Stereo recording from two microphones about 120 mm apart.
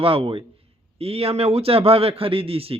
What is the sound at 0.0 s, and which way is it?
Speech, 50° right (ahead or behind).